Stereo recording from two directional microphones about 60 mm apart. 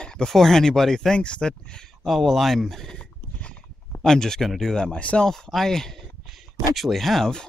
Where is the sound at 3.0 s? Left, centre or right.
Centre.